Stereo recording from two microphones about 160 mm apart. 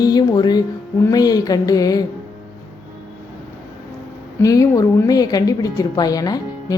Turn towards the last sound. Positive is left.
turn(degrees=25)  # may be behind; listen again after turning